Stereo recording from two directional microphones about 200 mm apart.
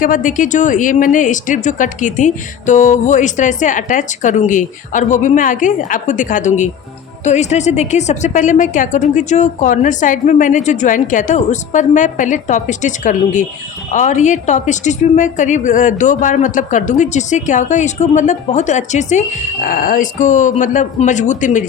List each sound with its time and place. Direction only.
0.0 s speech: 40° left (ahead or behind)